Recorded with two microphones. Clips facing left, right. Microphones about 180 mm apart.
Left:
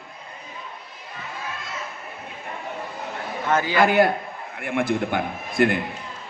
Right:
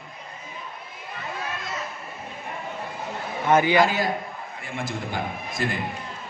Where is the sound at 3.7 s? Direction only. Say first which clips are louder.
Left 3 dB; 60° left (ahead or behind).